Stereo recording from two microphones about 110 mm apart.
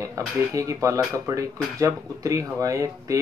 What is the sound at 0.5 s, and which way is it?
Speech, 30° right (ahead or behind).